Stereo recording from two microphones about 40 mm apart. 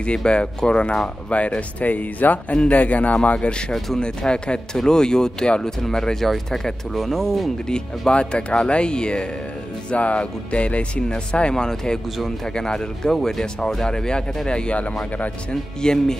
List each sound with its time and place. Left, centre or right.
0.0 s speech: left
2.5 s speech: left
2.8 s speech: left
3.3 s speech: left; by 7.5 s centre
7.6 s speech: centre
11.5 s speech: centre
15.8 s speech: centre